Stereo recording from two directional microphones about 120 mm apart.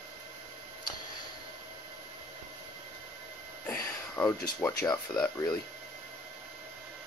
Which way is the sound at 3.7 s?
15° left (ahead or behind).